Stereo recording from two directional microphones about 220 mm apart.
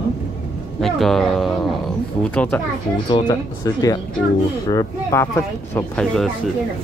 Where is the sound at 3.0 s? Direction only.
20° left (ahead or behind); by 6.3 s 5° left (ahead or behind).